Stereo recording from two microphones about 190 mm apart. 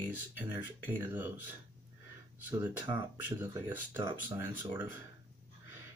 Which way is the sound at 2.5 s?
10° right (ahead or behind).